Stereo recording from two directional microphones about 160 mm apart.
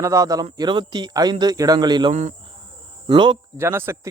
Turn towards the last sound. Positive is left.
turn(degrees=-15)  # may be behind; listen again after turning